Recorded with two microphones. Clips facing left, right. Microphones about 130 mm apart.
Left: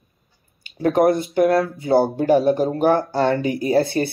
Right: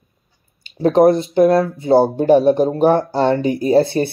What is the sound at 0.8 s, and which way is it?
Speech, 25° right (ahead or behind).